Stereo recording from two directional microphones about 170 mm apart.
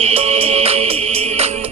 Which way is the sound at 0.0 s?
35° right (ahead or behind).